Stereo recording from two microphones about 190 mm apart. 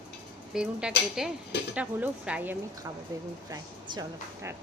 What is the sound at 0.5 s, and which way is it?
A woman's voice, 5° right (ahead or behind).